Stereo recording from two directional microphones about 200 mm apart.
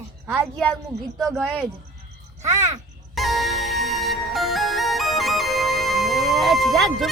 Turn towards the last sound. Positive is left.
turn(degrees=0)  # may be behind; listen again after turning